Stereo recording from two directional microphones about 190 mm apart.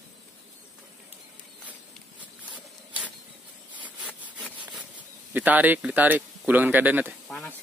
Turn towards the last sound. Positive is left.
turn(degrees=0)  # may be behind; listen again after turning